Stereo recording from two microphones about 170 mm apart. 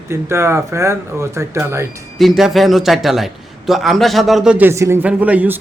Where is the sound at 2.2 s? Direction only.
Centre (ahead or behind).